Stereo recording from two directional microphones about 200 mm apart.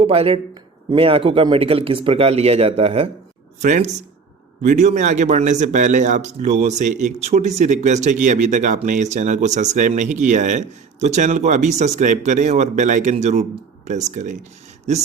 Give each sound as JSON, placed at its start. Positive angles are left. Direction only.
{"t": 0.0, "sound": "a man's voice", "side_deg": -30}